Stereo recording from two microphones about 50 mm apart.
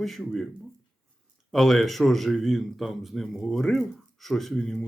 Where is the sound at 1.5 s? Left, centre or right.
Centre.